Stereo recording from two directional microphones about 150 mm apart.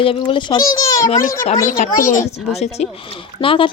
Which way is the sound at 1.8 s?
50° left (ahead or behind).